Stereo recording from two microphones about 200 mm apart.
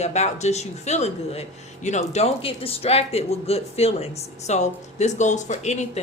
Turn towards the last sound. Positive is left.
turn(degrees=35)  # may be behind; listen again after turning